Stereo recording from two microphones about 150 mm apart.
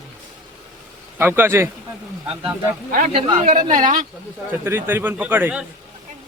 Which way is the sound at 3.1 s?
35° right (ahead or behind).